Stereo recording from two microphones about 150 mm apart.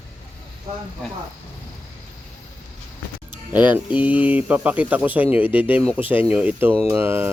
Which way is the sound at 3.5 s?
10° right (ahead or behind).